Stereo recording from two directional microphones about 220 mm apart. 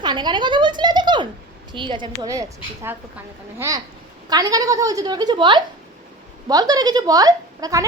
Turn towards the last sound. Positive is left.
turn(degrees=-15)  # may be behind; listen again after turning